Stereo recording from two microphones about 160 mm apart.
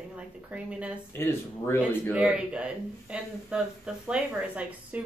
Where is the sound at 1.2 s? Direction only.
15° left (ahead or behind).